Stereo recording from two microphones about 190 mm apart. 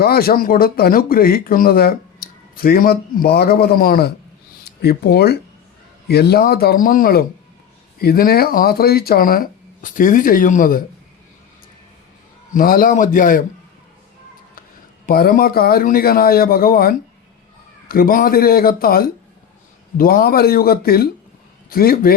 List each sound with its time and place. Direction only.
0.0 s speech: 55° left (ahead or behind)
12.5 s speech: 45° left (ahead or behind)
15.0 s speech: 50° left (ahead or behind)